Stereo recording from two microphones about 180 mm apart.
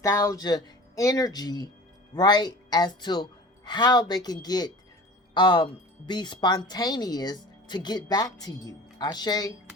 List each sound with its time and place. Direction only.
0.0 s speech: 20° left (ahead or behind)